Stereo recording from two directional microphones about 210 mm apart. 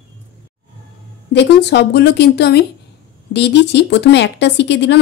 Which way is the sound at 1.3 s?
55° left (ahead or behind).